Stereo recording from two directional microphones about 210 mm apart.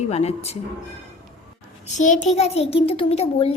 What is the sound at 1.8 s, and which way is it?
A child's voice, 35° left (ahead or behind).